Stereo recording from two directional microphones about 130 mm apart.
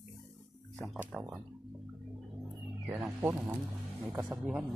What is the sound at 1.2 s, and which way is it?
Speech, 10° right (ahead or behind).